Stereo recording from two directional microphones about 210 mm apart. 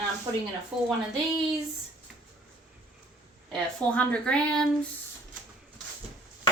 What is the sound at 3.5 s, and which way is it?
Speech, 5° left (ahead or behind).